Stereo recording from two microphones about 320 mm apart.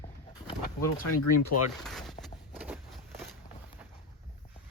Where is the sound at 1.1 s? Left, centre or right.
Left.